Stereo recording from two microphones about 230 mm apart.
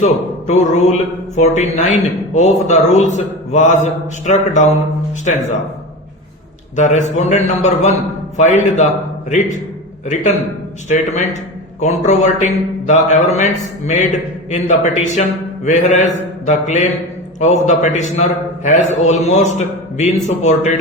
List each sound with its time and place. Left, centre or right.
0.0 s a man's voice: left
6.7 s a man's voice: left
10.8 s a man's voice: left